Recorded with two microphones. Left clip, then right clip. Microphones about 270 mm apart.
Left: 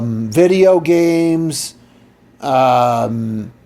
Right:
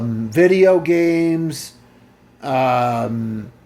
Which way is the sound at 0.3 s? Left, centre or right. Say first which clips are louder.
Left 2 dB; left.